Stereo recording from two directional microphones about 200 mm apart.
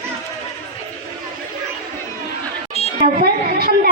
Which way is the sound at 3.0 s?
45° right (ahead or behind).